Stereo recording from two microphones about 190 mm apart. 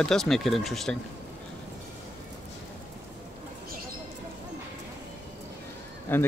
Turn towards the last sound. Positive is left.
turn(degrees=10)  # may be behind; listen again after turning